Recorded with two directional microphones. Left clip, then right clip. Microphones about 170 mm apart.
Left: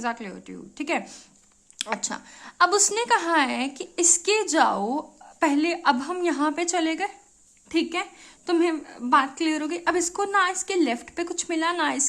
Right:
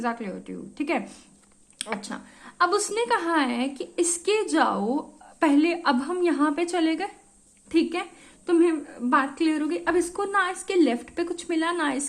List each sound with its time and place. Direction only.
0.0 s a woman's voice: 20° left (ahead or behind)